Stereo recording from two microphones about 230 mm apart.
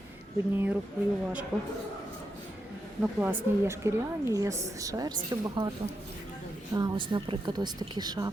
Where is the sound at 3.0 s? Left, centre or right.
Centre.